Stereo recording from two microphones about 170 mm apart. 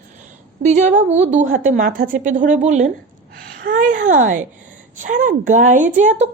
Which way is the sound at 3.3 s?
55° right (ahead or behind).